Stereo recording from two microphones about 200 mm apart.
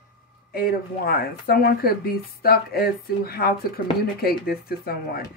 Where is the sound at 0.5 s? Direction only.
50° left (ahead or behind).